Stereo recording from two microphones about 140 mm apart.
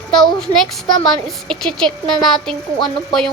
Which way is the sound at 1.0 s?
5° left (ahead or behind).